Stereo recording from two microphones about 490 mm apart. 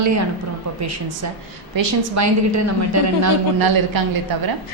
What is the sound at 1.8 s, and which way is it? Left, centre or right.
A woman's voice, right.